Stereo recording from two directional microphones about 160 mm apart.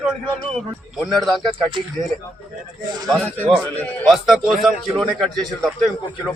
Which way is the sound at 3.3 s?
10° left (ahead or behind).